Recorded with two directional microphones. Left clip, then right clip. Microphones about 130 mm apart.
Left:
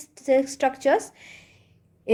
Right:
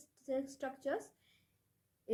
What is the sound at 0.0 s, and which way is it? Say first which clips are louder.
Speech: left 19 dB; 25° left (ahead or behind).